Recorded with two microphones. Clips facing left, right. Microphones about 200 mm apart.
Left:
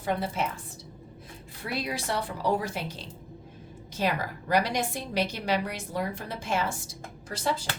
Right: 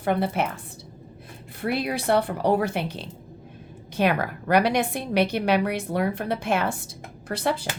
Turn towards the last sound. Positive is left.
turn(degrees=-60)  # may be behind; listen again after turning